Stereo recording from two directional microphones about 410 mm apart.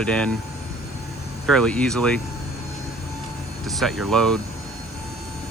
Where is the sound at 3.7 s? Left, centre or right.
Centre.